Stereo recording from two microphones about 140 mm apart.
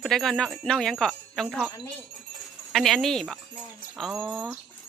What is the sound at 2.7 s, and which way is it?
Speech, centre (ahead or behind).